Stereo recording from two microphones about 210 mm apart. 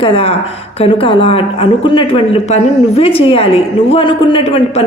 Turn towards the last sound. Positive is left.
turn(degrees=25)  # may be behind; listen again after turning